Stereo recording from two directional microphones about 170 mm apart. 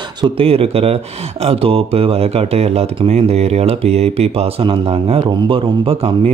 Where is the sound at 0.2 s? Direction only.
35° right (ahead or behind).